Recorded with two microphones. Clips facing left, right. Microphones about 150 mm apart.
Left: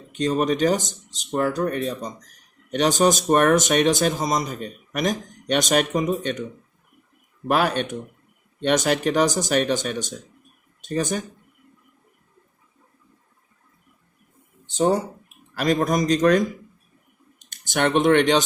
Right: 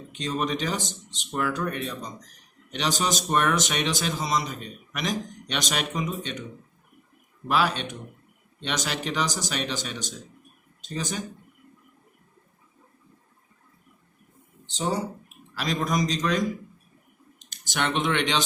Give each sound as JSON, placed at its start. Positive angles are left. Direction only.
{"t": 0.1, "sound": "speech", "side_deg": 45}
{"t": 7.4, "sound": "speech", "side_deg": 50}
{"t": 14.7, "sound": "speech", "side_deg": 50}
{"t": 17.5, "sound": "speech", "side_deg": 50}